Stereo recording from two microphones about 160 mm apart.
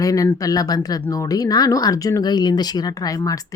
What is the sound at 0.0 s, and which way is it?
Speech, 20° left (ahead or behind).